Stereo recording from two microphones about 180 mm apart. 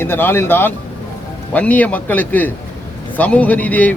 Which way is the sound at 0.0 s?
10° left (ahead or behind).